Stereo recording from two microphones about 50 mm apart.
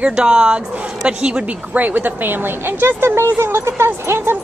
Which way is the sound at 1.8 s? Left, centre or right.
Right.